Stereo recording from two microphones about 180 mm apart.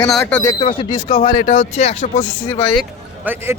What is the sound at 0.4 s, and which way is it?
Speech, 30° left (ahead or behind).